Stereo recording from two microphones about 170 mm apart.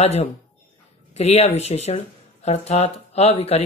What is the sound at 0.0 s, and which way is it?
Speech, 40° left (ahead or behind).